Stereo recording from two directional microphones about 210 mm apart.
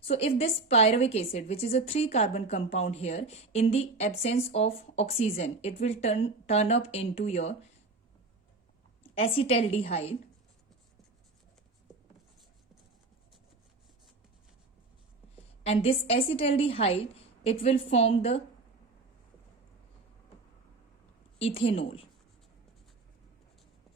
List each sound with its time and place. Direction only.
0.0 s a woman's voice: 30° left (ahead or behind)
9.1 s a woman's voice: 30° left (ahead or behind)
15.6 s a woman's voice: 30° left (ahead or behind)
21.3 s a woman's voice: 25° left (ahead or behind)